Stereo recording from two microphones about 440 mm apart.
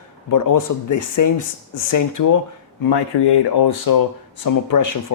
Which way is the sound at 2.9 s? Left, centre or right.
Left.